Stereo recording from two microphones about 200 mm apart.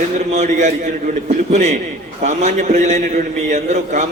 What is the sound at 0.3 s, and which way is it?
A man's voice, 35° right (ahead or behind).